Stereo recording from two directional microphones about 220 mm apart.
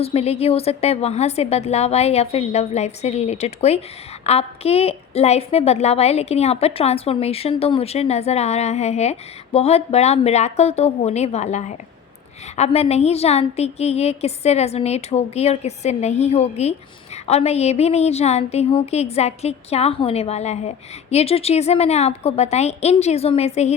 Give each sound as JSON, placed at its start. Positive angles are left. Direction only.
{"t": 0.0, "sound": "a woman's voice", "side_deg": 30}